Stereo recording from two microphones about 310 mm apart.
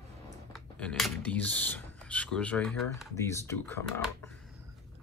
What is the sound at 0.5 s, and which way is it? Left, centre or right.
Speech, centre.